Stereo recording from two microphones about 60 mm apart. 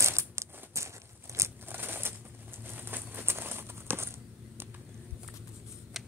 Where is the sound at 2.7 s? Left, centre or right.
Right.